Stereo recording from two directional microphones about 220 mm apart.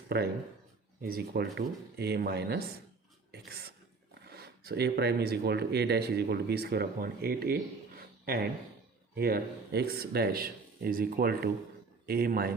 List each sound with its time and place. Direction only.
0.1 s speech: 45° right (ahead or behind)